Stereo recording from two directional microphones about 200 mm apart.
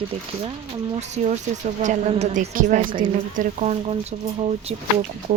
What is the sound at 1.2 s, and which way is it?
A woman's voice, 35° right (ahead or behind).